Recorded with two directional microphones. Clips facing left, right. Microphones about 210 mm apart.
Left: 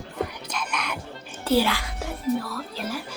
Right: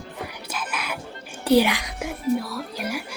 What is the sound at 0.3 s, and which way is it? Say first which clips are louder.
Music: even; 5° right (ahead or behind).